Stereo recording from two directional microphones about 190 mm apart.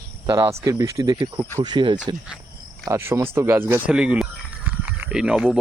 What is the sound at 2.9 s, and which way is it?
Speech, 15° right (ahead or behind).